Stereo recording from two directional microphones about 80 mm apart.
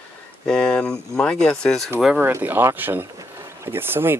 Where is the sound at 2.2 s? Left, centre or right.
Right.